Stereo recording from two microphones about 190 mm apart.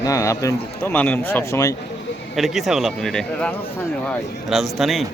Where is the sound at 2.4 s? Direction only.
Centre (ahead or behind).